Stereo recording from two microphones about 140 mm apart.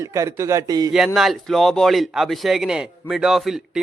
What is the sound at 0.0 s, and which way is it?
Speech, 20° right (ahead or behind).